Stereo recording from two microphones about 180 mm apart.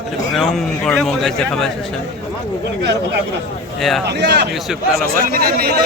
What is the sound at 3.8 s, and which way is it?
Speech, centre (ahead or behind).